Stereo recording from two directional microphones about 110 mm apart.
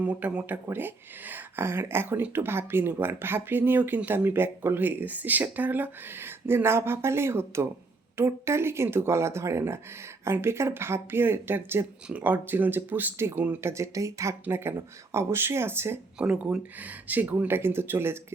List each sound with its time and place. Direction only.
0.0 s speech: 15° right (ahead or behind)
16.1 s speech: 10° right (ahead or behind)